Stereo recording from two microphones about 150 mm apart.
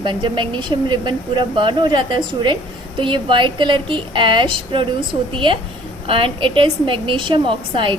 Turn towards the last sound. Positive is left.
turn(degrees=-35)  # may be behind; listen again after turning